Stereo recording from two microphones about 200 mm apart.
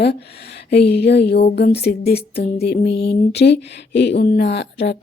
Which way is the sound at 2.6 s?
55° left (ahead or behind).